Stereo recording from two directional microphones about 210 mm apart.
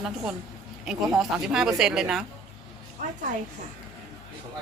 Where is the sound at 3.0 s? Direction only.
40° right (ahead or behind).